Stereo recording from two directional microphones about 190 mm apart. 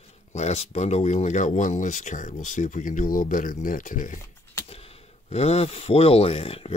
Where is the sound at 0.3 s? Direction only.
35° left (ahead or behind).